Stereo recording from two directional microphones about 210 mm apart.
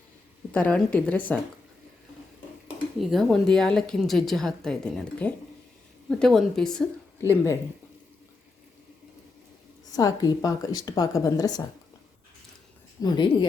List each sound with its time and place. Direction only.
0.5 s a woman's voice: 5° left (ahead or behind)
3.0 s a woman's voice: centre (ahead or behind)
7.2 s a woman's voice: 15° left (ahead or behind)
9.9 s a woman's voice: 15° left (ahead or behind)
13.0 s speech: 20° left (ahead or behind)